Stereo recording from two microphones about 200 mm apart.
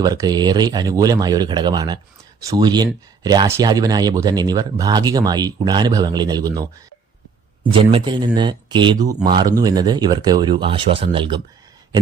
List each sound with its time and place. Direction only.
0.0 s speech: 20° right (ahead or behind)